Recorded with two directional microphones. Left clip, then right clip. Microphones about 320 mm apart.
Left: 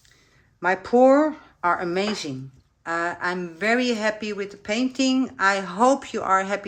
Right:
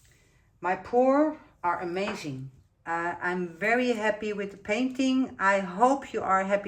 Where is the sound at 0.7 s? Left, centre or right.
Centre.